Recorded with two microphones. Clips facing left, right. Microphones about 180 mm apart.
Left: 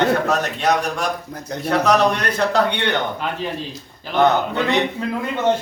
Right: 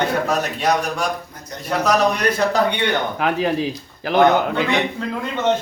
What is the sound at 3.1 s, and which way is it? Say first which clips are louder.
Speech: right 6 dB; 85° right.